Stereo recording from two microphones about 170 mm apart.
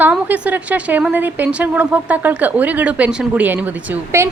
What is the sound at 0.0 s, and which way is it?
A woman's voice, 10° right (ahead or behind).